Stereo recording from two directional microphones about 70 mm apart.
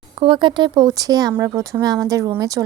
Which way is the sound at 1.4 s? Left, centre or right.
Right.